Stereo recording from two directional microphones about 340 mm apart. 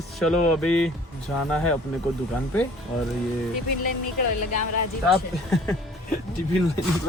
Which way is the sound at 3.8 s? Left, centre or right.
Left.